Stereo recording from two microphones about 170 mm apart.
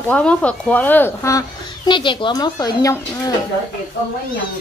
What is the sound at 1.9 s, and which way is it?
Speech, 30° left (ahead or behind).